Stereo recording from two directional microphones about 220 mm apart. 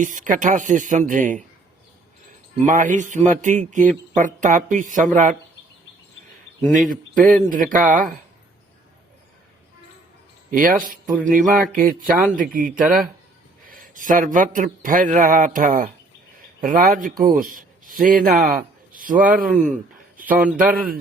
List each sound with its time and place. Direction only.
0.0 s a man's voice: 35° right (ahead or behind)
2.6 s a man's voice: 35° right (ahead or behind)
6.6 s a man's voice: 35° right (ahead or behind)
10.5 s a man's voice: 40° right (ahead or behind)
20.2 s a man's voice: 5° right (ahead or behind)
20.7 s a man's voice: 40° right (ahead or behind)